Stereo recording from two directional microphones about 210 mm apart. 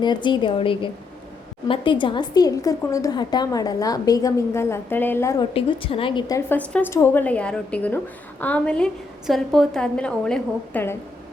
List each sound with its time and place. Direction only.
0.0 s a woman's voice: 20° left (ahead or behind)
5.5 s a woman's voice: 25° left (ahead or behind); by 10.9 s 10° left (ahead or behind)